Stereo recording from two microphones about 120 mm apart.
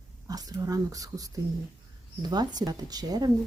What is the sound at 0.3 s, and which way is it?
Speech, 30° right (ahead or behind).